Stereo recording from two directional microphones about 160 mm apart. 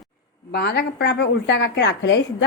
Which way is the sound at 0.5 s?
90° left.